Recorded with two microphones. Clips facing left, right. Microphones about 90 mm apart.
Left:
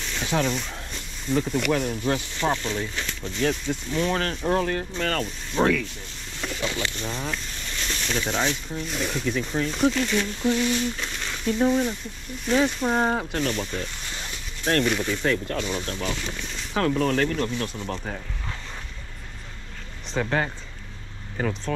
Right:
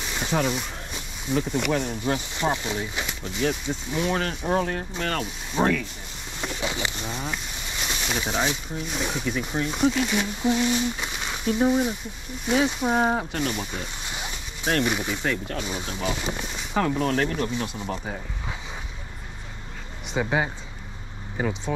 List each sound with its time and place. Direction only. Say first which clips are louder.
0.0 s a sound: even; 10° right (ahead or behind)
2.3 s speech: left 1 dB; 15° right (ahead or behind)
20.2 s speech: even; 10° right (ahead or behind)